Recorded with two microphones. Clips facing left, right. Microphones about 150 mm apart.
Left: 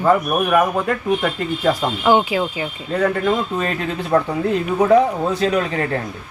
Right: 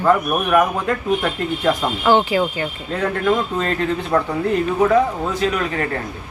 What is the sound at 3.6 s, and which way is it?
Speech, 10° left (ahead or behind).